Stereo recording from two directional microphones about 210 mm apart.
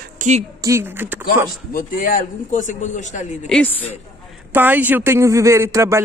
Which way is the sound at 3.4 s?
5° left (ahead or behind).